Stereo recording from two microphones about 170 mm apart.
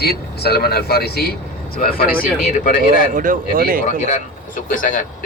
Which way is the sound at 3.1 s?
55° right (ahead or behind).